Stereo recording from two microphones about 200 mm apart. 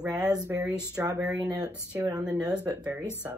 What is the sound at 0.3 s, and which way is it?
Speech, 20° right (ahead or behind).